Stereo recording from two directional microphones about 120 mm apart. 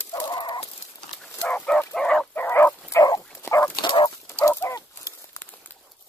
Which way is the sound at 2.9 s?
30° left (ahead or behind).